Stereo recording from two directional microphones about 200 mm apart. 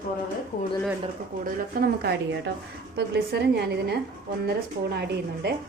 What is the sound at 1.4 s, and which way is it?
A woman's voice, 50° right (ahead or behind).